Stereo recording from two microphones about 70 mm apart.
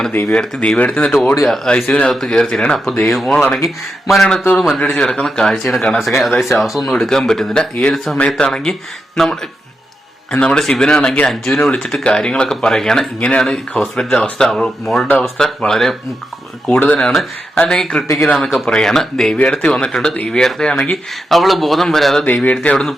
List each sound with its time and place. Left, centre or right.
0.3 s speech: centre
3.0 s speech: centre
3.3 s speech: centre
4.8 s speech: centre
5.2 s speech: centre
16.6 s speech: centre
17.0 s speech: centre
19.4 s speech: centre
21.2 s speech: centre